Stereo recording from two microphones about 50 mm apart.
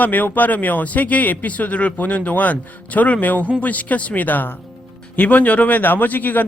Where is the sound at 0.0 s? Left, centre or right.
Left.